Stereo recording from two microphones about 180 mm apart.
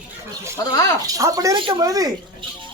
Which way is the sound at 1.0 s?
20° right (ahead or behind).